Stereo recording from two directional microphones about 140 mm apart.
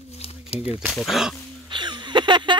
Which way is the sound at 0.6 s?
10° right (ahead or behind).